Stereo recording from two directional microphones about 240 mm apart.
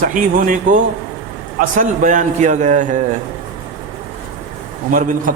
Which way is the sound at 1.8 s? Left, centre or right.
Right.